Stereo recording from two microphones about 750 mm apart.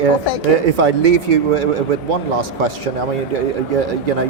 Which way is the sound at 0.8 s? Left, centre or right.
Right.